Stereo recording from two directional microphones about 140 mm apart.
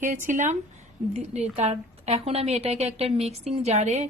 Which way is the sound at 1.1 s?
50° right (ahead or behind).